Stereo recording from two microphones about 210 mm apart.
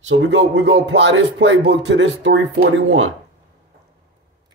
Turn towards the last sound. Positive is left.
turn(degrees=-65)  # may be behind; listen again after turning